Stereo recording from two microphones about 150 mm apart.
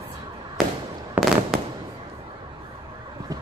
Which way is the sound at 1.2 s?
10° right (ahead or behind).